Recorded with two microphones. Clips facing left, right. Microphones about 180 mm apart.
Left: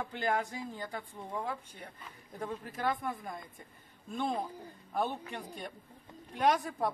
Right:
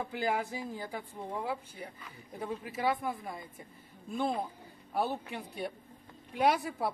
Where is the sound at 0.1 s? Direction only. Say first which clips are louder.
Even; 5° right (ahead or behind).